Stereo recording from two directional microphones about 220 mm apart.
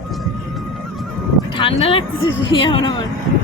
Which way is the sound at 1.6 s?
25° left (ahead or behind).